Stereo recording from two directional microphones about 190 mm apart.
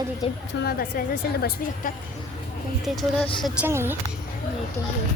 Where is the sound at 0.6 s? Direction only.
55° left (ahead or behind).